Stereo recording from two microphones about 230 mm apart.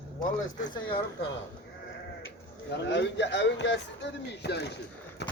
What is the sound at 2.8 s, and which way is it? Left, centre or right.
Speech, left.